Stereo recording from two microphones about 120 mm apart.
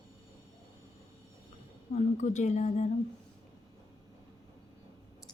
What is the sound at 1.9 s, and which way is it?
Speech, 90° left.